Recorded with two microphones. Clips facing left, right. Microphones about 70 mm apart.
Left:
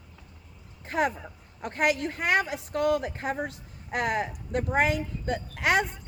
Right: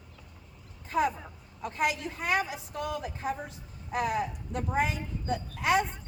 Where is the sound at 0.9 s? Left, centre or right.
Left.